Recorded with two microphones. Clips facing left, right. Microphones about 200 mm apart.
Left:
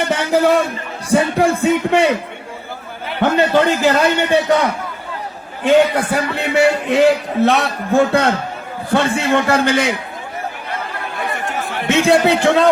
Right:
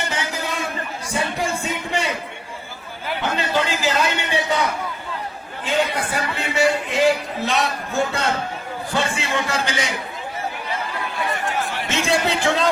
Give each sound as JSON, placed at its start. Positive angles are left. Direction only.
{"t": 0.0, "sound": "a sound", "side_deg": 60}
{"t": 1.1, "sound": "a man's voice", "side_deg": 60}
{"t": 3.2, "sound": "a man's voice", "side_deg": 55}
{"t": 11.4, "sound": "speech", "side_deg": 55}